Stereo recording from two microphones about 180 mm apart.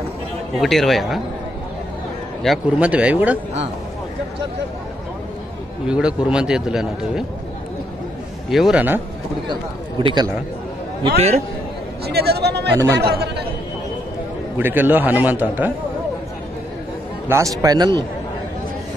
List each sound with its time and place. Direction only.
0.6 s a man's voice: centre (ahead or behind)
2.4 s a man's voice: 5° right (ahead or behind)
5.9 s a man's voice: 5° right (ahead or behind)
8.5 s a man's voice: centre (ahead or behind)
9.5 s speech: 25° right (ahead or behind)
12.1 s speech: 65° right (ahead or behind)
14.6 s a man's voice: 10° right (ahead or behind)
17.3 s speech: 15° right (ahead or behind)